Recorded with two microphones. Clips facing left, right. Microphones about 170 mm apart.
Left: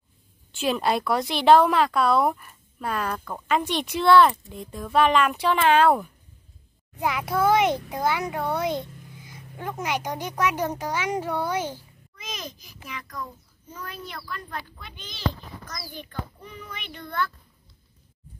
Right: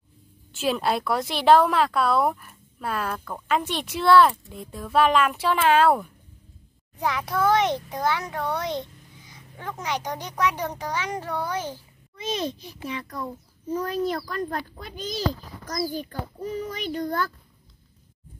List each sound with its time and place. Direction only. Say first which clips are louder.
0.5 s speech: even; centre (ahead or behind)
7.0 s a child's voice: left 1 dB; 10° left (ahead or behind)
12.2 s a child's voice: right 10 dB; 30° right (ahead or behind)